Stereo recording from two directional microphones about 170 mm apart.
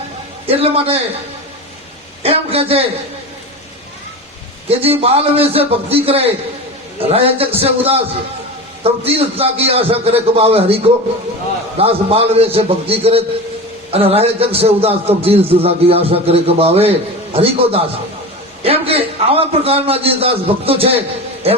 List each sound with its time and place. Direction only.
0.4 s a man's voice: 35° right (ahead or behind)
2.2 s a man's voice: 35° right (ahead or behind)
4.7 s a man's voice: 35° right (ahead or behind)